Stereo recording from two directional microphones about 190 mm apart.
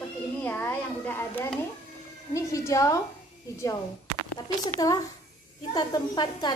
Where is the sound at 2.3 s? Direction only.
15° left (ahead or behind).